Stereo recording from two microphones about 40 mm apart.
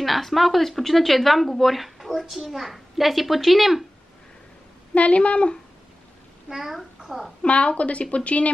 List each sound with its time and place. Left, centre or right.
0.0 s speech: centre
4.9 s a woman's voice: left
6.5 s speech: centre
7.4 s a woman's voice: left